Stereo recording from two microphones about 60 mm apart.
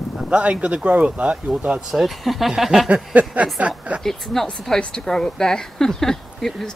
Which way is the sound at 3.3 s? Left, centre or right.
Right.